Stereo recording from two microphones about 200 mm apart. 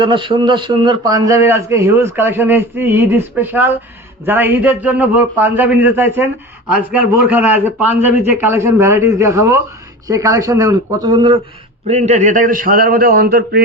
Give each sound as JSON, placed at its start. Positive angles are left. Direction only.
{"t": 0.0, "sound": "speech", "side_deg": -25}
{"t": 11.9, "sound": "a man's voice", "side_deg": -35}